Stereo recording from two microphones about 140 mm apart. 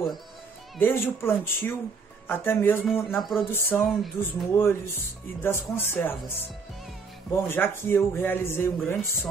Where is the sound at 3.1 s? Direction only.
Centre (ahead or behind).